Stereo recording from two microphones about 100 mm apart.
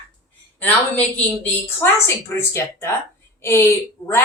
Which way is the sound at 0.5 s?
20° left (ahead or behind).